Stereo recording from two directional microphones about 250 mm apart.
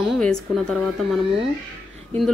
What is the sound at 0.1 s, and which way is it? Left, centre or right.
A woman's voice, centre.